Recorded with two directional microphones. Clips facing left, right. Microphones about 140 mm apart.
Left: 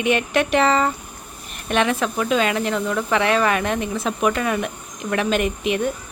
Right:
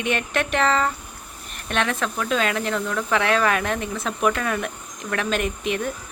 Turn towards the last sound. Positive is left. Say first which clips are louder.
# left 4 dB
turn(degrees=5)  # may be behind; listen again after turning